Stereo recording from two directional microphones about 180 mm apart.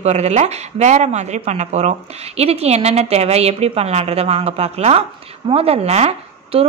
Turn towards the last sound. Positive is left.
turn(degrees=-35)  # may be behind; listen again after turning